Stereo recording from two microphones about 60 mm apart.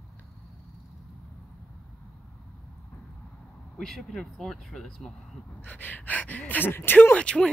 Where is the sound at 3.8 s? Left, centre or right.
Centre.